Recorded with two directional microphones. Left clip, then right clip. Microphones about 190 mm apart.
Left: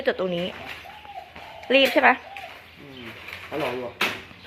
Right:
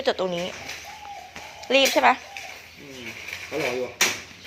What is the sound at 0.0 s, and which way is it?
Speech, 10° left (ahead or behind).